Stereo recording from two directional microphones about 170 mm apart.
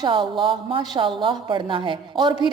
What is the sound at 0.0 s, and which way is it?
A woman's voice, 30° right (ahead or behind).